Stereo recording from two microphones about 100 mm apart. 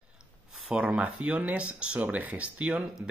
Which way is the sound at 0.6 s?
10° right (ahead or behind).